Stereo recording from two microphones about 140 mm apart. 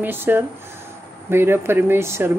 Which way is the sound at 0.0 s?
15° right (ahead or behind).